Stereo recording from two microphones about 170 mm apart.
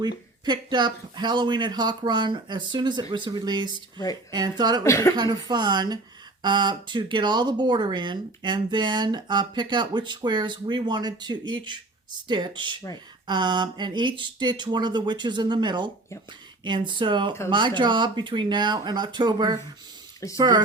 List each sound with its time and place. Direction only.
0.4 s speech: 25° right (ahead or behind)
3.9 s speech: 20° left (ahead or behind)
4.3 s speech: 25° right (ahead or behind)
4.8 s speech: 15° left (ahead or behind)
5.1 s speech: 25° right (ahead or behind)